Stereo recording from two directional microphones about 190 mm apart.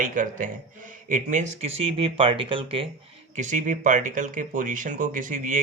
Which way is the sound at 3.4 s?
40° right (ahead or behind).